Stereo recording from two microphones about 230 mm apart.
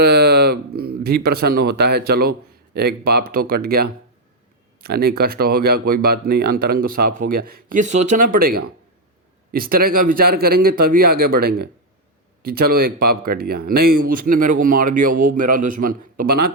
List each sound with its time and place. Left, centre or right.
0.0 s speech: right